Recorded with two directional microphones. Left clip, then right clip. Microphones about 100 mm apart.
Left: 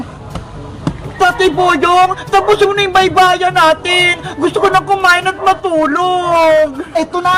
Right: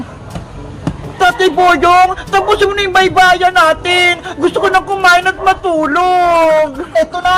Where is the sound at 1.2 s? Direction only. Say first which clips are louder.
Right 1 dB; 30° right (ahead or behind).